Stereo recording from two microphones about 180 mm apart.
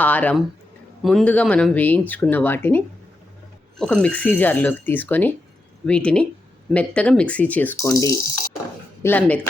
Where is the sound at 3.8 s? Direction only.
5° left (ahead or behind).